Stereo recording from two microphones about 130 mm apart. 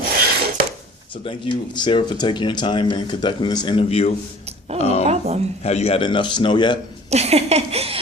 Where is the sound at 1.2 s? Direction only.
40° left (ahead or behind).